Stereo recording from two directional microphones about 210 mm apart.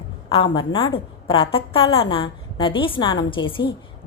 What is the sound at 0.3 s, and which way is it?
A woman's voice, 25° left (ahead or behind).